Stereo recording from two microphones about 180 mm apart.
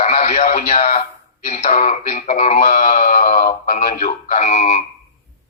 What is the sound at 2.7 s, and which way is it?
Speech, 50° left (ahead or behind).